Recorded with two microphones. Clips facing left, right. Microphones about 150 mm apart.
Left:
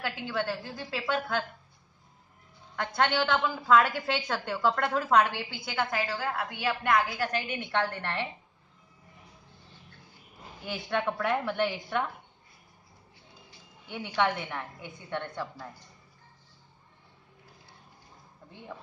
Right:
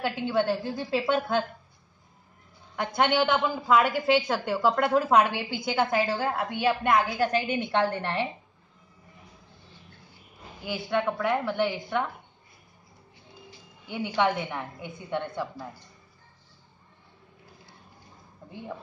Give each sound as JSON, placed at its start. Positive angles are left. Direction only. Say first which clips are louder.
{"t": 0.0, "sound": "a woman's voice", "louder": "right 6 dB", "side_deg": -25}
{"t": 2.7, "sound": "a woman's voice", "louder": "right 3 dB", "side_deg": -15}
{"t": 10.6, "sound": "a woman's voice", "louder": "right 3 dB", "side_deg": -5}
{"t": 13.8, "sound": "a woman's voice", "louder": "right 3 dB", "side_deg": -5}